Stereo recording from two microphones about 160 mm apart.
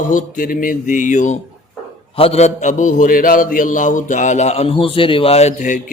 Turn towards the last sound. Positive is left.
turn(degrees=50)  # may be behind; listen again after turning